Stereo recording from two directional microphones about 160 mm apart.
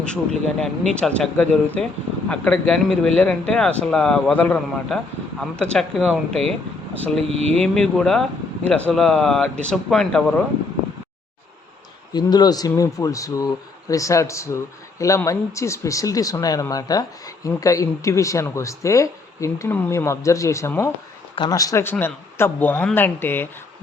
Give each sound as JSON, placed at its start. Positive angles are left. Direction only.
{"t": 0.0, "sound": "speech", "side_deg": 5}
{"t": 12.1, "sound": "speech", "side_deg": 25}